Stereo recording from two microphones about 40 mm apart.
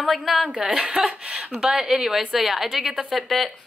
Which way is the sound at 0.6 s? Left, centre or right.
Centre.